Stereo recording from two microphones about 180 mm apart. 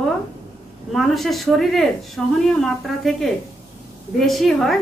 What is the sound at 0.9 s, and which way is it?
Speech, centre (ahead or behind).